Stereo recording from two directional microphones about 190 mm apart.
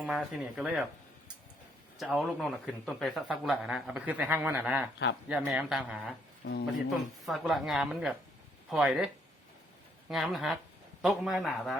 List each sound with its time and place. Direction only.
0.0 s a man's voice: centre (ahead or behind)
2.0 s a man's voice: centre (ahead or behind)
6.4 s speech: 60° left (ahead or behind)
7.3 s a man's voice: centre (ahead or behind)
10.1 s a man's voice: centre (ahead or behind)